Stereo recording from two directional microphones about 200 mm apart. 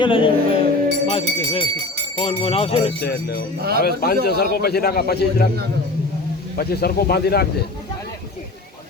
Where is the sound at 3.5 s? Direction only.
50° right (ahead or behind).